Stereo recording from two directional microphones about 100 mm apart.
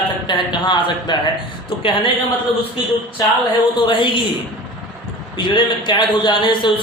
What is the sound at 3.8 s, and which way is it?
Speech, 60° left (ahead or behind).